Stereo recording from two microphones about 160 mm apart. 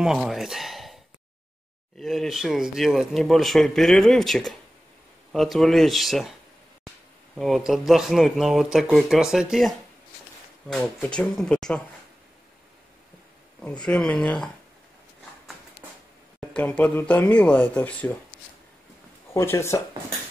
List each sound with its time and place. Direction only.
0.0 s speech: 5° right (ahead or behind)
2.0 s speech: centre (ahead or behind)
7.3 s speech: centre (ahead or behind)
13.6 s speech: 5° left (ahead or behind)
16.3 s speech: 5° left (ahead or behind)
19.3 s speech: 15° left (ahead or behind)